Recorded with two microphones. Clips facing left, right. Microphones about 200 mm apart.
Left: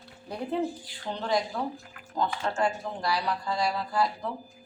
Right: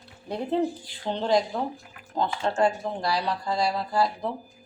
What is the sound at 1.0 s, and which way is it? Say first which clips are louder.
Speech: right 5 dB; 25° right (ahead or behind).